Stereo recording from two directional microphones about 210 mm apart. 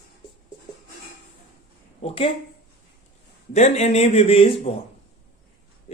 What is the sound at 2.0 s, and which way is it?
Speech, 30° left (ahead or behind).